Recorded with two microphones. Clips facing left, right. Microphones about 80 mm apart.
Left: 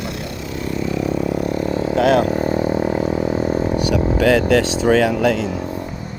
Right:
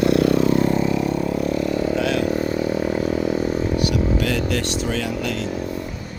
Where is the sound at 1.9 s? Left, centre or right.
Left.